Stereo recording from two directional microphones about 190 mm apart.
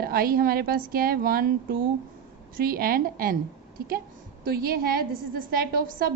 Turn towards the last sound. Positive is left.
turn(degrees=-50)  # may be behind; listen again after turning